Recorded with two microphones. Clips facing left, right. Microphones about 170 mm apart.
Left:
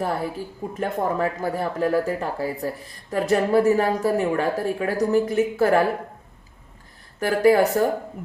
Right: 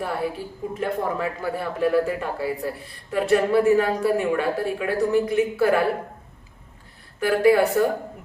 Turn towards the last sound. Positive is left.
turn(degrees=40)  # may be behind; listen again after turning